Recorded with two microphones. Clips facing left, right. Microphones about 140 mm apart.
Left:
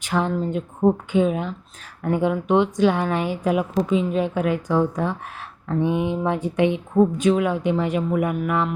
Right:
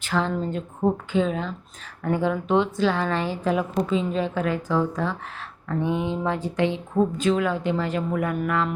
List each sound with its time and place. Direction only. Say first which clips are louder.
0.0 s a woman's voice: left 2 dB; 15° left (ahead or behind)
0.3 s a woman's voice: left 3 dB; 5° left (ahead or behind)